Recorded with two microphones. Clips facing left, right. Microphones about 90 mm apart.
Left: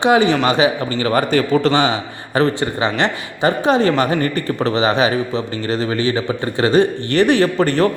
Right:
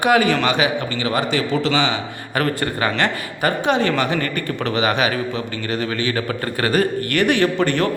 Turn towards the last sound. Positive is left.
turn(degrees=35)  # may be behind; listen again after turning